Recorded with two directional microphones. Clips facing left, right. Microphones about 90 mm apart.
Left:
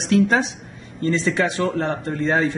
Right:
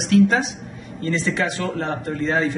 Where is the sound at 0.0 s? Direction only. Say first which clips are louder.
Right 1 dB; 35° left (ahead or behind).